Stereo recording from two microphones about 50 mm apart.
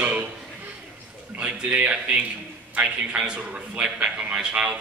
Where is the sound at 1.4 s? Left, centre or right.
Right.